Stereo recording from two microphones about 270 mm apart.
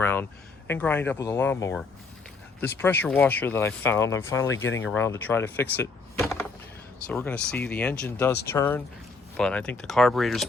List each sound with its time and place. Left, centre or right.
0.0 s a sound: centre
0.7 s speech: centre
4.5 s speech: left
4.9 s speech: centre